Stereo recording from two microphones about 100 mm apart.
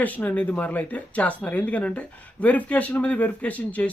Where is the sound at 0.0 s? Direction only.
15° left (ahead or behind).